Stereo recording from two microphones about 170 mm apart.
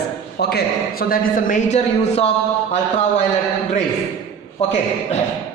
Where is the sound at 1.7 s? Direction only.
40° left (ahead or behind).